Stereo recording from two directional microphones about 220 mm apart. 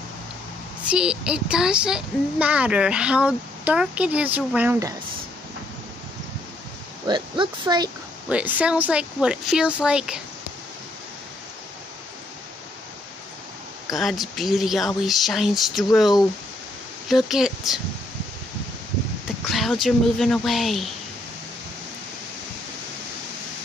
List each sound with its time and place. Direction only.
0.8 s speech: 5° right (ahead or behind)
7.1 s speech: 20° right (ahead or behind)
8.3 s speech: 5° right (ahead or behind)
13.8 s speech: centre (ahead or behind)
19.5 s speech: centre (ahead or behind)